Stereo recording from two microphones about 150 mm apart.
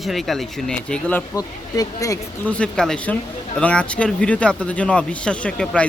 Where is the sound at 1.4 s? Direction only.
25° left (ahead or behind).